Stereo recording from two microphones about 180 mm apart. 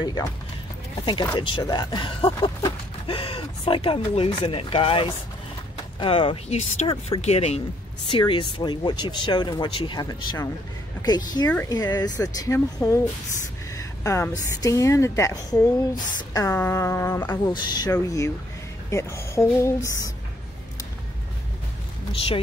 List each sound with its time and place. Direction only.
0.0 s a woman's voice: 25° left (ahead or behind)